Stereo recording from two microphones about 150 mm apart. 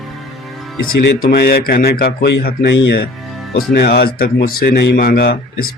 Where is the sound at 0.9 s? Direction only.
75° left (ahead or behind).